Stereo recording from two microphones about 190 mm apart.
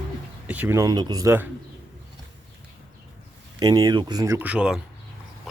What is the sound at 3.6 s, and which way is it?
Speech, 20° right (ahead or behind).